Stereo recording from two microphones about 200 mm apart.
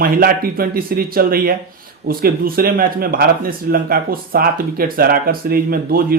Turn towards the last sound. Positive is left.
turn(degrees=-50)  # may be behind; listen again after turning